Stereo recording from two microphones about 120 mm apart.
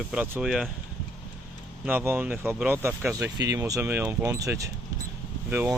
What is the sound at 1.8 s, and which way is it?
Speech, 15° right (ahead or behind).